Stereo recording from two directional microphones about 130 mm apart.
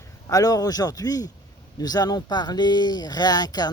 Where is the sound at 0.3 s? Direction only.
30° left (ahead or behind).